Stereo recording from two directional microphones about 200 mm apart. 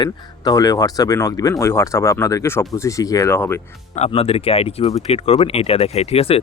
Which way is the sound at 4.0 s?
30° left (ahead or behind).